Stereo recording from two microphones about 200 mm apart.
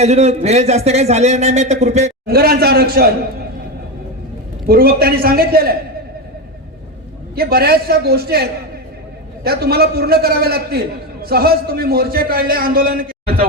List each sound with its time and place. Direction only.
0.0 s speech: 35° right (ahead or behind)
2.2 s a man's voice: 50° right (ahead or behind)
4.6 s a man's voice: 50° right (ahead or behind)
7.3 s a man's voice: 50° right (ahead or behind)